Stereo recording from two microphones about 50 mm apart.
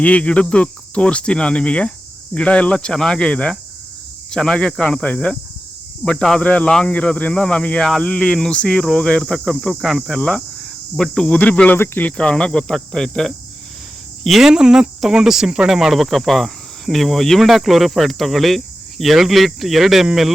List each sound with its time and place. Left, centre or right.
0.0 s cricket: left
2.3 s speech: left
4.9 s cricket: left
6.1 s speech: centre
6.4 s cricket: left
8.0 s speech: centre
9.4 s speech: centre
10.9 s speech: centre
11.3 s cricket: left
12.0 s speech: left
14.3 s speech: centre